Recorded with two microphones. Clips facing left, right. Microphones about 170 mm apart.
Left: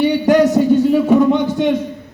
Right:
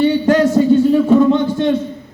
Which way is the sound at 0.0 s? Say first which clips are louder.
Even; 15° left (ahead or behind).